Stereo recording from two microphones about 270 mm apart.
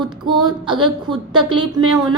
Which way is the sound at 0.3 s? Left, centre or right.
Centre.